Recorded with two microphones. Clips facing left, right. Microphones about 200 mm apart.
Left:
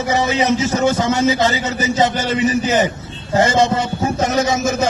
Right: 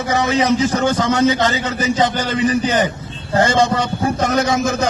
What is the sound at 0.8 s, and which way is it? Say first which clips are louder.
A man's voice: even; 5° left (ahead or behind).